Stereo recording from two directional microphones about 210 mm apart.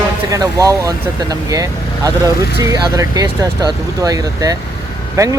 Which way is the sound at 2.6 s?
20° right (ahead or behind).